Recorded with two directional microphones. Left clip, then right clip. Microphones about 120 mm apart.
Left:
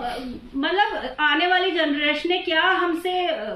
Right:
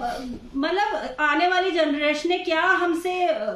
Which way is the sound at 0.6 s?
45° right (ahead or behind).